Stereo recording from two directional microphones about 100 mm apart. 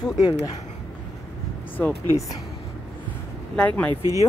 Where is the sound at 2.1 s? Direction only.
35° left (ahead or behind).